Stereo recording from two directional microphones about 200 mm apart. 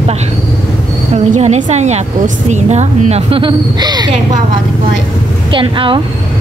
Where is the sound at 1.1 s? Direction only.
35° right (ahead or behind).